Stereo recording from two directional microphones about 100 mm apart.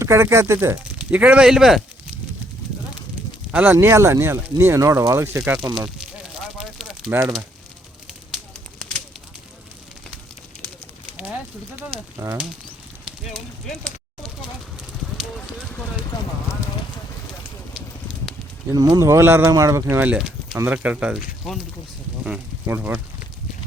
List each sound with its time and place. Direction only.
0.0 s speech: 30° right (ahead or behind)
0.9 s speech: 15° right (ahead or behind)
3.5 s speech: 15° right (ahead or behind)
6.0 s a sound: 5° right (ahead or behind)
13.1 s a sound: centre (ahead or behind)
15.4 s a sound: 15° left (ahead or behind)
18.7 s speech: 40° right (ahead or behind)
20.1 s speech: 10° right (ahead or behind)
22.6 s speech: 20° right (ahead or behind)